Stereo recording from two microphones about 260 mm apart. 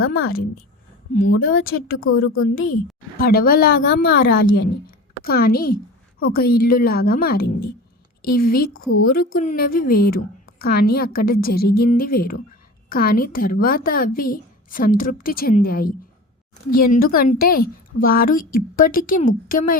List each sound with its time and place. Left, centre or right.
0.0 s a woman's voice: left
3.2 s a woman's voice: left